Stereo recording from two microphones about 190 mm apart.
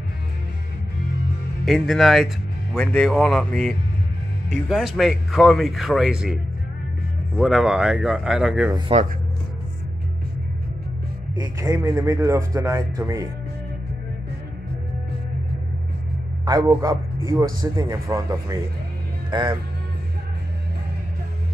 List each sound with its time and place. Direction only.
1.7 s speech: centre (ahead or behind)
11.3 s speech: 20° right (ahead or behind)
16.4 s a man's voice: 20° right (ahead or behind)